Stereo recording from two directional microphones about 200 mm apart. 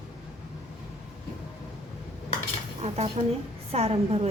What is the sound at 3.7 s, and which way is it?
Speech, 30° right (ahead or behind).